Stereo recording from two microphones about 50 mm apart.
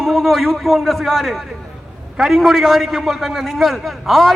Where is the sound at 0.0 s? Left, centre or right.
Centre.